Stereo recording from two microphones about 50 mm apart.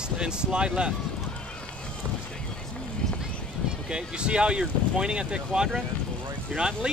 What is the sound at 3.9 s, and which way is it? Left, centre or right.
Speech, centre.